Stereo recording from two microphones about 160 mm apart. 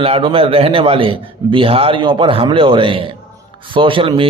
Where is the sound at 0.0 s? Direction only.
35° right (ahead or behind).